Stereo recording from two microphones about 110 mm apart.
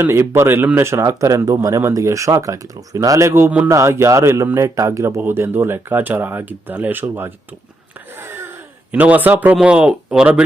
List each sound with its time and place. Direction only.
0.0 s a man's voice: 20° right (ahead or behind)
8.2 s a sound: 20° right (ahead or behind)
8.9 s speech: 15° right (ahead or behind)